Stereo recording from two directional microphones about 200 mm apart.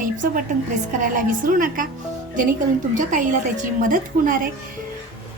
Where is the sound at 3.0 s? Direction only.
40° right (ahead or behind).